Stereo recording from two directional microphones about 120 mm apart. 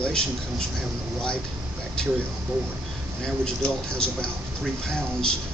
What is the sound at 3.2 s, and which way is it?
A man's voice, 5° left (ahead or behind).